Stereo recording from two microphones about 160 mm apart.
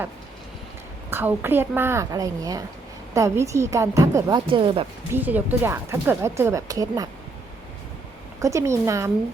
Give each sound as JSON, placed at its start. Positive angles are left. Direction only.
{"t": 1.1, "sound": "a woman's voice", "side_deg": -15}
{"t": 5.1, "sound": "speech", "side_deg": -10}
{"t": 8.4, "sound": "a woman's voice", "side_deg": -20}